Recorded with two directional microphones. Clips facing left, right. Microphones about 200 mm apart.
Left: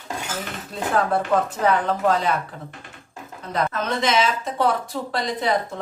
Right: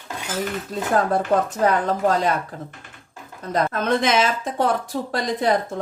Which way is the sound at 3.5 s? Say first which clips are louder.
Right 4 dB; 50° right (ahead or behind).